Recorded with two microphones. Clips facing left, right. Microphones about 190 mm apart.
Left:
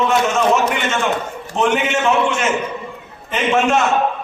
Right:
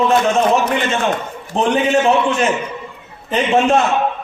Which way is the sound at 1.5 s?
35° right (ahead or behind).